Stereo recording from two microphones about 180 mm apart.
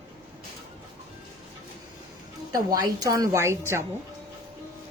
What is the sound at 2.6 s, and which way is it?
Speech, 20° right (ahead or behind).